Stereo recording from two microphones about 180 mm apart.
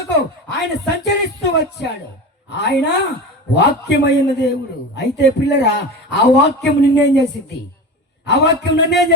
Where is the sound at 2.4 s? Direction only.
70° left (ahead or behind).